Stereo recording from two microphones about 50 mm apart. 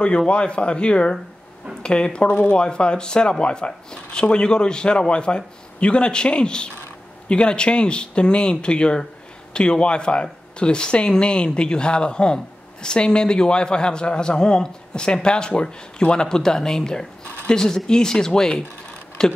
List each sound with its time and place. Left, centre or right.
0.3 s a man's voice: left